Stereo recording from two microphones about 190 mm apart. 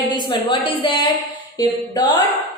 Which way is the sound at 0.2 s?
25° left (ahead or behind).